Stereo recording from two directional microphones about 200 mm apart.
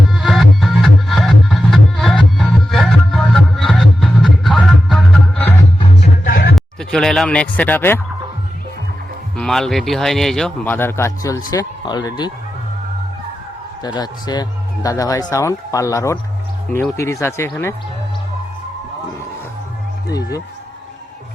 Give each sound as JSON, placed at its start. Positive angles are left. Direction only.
{"t": 0.1, "sound": "music", "side_deg": 0}
{"t": 6.0, "sound": "music", "side_deg": 45}
{"t": 6.6, "sound": "speech", "side_deg": 5}
{"t": 9.3, "sound": "speech", "side_deg": 5}
{"t": 13.8, "sound": "speech", "side_deg": 20}